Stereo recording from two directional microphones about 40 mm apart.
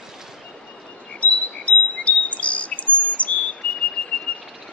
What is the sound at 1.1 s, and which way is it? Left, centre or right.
Chirp, left.